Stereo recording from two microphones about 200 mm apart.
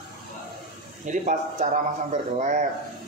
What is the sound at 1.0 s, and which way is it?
A man's voice, 40° right (ahead or behind).